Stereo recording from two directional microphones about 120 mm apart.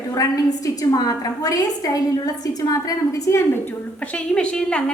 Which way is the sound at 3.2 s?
25° left (ahead or behind).